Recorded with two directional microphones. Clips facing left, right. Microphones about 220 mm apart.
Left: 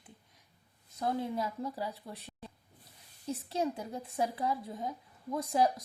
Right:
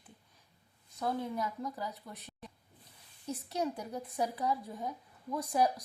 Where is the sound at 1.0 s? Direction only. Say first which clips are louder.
Left 1 dB; 25° left (ahead or behind).